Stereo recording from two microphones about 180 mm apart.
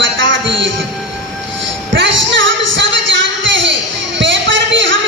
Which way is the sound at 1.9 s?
90° right.